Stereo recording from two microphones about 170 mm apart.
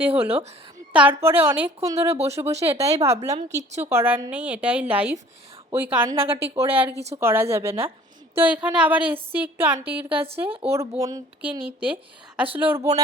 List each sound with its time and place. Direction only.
0.0 s speech: 10° right (ahead or behind)
3.3 s speech: 40° right (ahead or behind)
3.8 s speech: 15° right (ahead or behind)
12.5 s speech: 15° right (ahead or behind)